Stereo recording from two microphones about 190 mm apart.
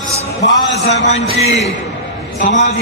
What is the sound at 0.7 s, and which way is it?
Speech, 65° left (ahead or behind).